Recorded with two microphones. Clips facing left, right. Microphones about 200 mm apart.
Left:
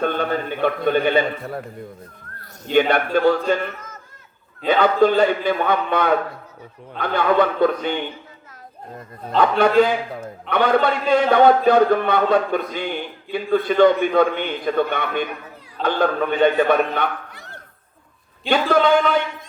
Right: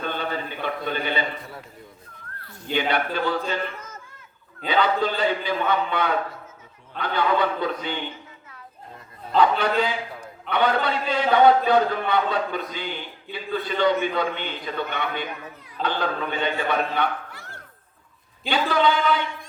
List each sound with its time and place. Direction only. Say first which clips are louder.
0.0 s a man's voice: left 7 dB; 50° left (ahead or behind)
2.7 s a man's voice: left 7 dB; 50° left (ahead or behind)
4.6 s a man's voice: left 7 dB; 45° left (ahead or behind)
9.4 s a man's voice: left 6 dB; 50° left (ahead or behind)
18.4 s a man's voice: left 5 dB; 50° left (ahead or behind)